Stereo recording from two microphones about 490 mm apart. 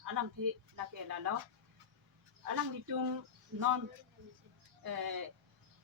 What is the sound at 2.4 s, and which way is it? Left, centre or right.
Speech, right.